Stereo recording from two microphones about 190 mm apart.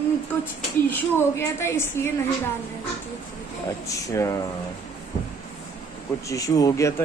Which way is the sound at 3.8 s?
15° left (ahead or behind).